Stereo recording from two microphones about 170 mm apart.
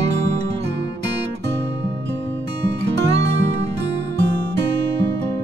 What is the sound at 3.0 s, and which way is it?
Music, 90° right.